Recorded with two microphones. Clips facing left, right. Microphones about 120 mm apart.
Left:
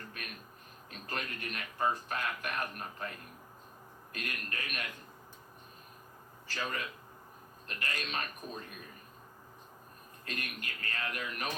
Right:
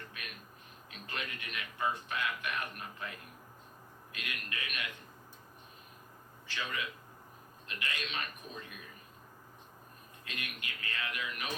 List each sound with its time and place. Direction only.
0.0 s a sound: 40° left (ahead or behind)
0.9 s a man's voice: 40° left (ahead or behind)
6.5 s a man's voice: 40° left (ahead or behind)
10.2 s speech: 40° left (ahead or behind)